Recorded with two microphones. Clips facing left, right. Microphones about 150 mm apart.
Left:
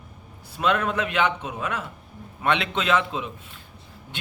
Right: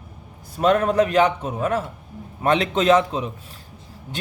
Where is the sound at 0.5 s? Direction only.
40° right (ahead or behind).